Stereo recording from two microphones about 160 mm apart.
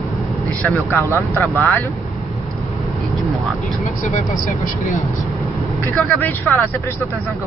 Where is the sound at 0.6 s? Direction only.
10° left (ahead or behind).